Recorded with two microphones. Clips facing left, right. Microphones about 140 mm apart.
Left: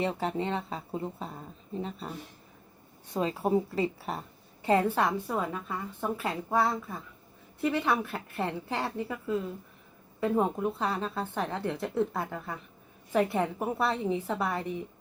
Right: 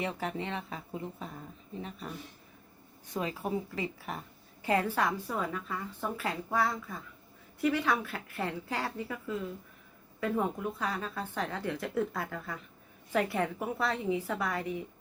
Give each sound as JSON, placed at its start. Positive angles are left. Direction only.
{"t": 0.0, "sound": "a woman's voice", "side_deg": 30}